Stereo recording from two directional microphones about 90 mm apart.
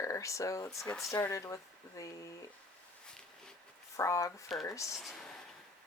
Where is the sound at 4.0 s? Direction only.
35° left (ahead or behind).